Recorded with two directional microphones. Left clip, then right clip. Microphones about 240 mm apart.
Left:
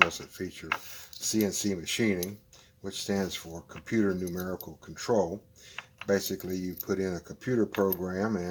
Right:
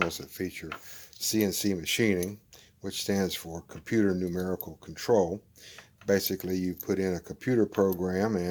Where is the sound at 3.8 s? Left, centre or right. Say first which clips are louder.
Right 2 dB; right.